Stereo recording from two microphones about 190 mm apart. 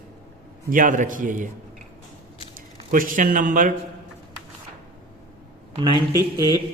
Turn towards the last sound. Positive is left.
turn(degrees=-20)  # may be behind; listen again after turning